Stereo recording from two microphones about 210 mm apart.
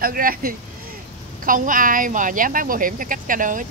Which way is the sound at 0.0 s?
45° right (ahead or behind).